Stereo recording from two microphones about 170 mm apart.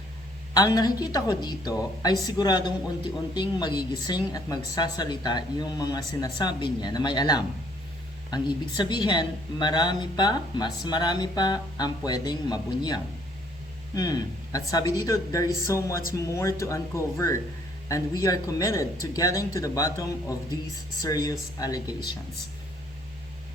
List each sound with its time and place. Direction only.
0.5 s speech: 20° left (ahead or behind)